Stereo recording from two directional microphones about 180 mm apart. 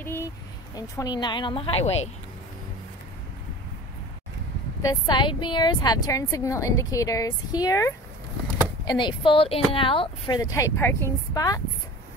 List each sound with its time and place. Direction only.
0.7 s a woman's voice: 20° left (ahead or behind)
4.8 s a woman's voice: 25° left (ahead or behind)